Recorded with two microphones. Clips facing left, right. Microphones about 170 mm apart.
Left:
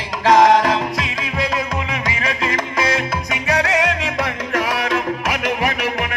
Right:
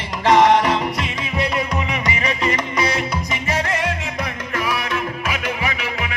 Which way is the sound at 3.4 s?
75° left (ahead or behind).